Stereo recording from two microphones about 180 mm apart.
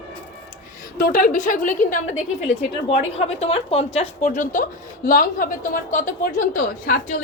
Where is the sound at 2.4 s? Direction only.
35° left (ahead or behind).